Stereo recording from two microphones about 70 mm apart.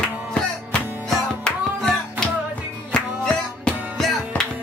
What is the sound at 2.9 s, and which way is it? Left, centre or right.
Music, centre.